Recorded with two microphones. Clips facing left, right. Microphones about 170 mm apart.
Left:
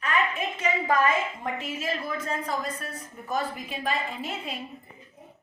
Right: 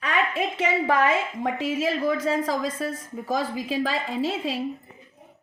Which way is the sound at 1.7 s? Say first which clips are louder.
Right 11 dB; 90° right.